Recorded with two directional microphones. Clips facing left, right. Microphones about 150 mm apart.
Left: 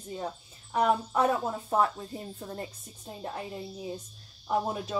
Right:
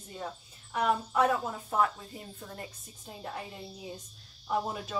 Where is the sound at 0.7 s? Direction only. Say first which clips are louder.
Left 3 dB; 35° left (ahead or behind).